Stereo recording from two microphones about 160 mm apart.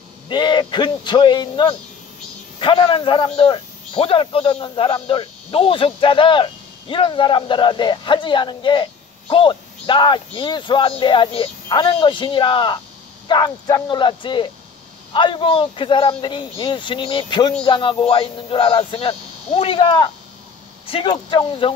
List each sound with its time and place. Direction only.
0.3 s a man's voice: 30° left (ahead or behind)